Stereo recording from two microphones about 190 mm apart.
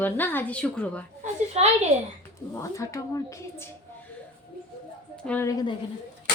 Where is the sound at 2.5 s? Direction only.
15° left (ahead or behind).